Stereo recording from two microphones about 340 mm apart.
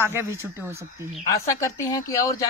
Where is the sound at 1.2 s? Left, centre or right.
Centre.